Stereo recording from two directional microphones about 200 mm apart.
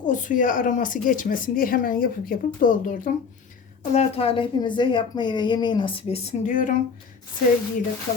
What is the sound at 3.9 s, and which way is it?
A woman's voice, 30° left (ahead or behind).